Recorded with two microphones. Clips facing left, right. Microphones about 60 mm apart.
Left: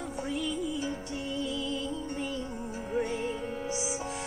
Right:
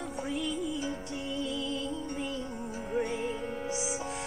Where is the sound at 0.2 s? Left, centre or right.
Centre.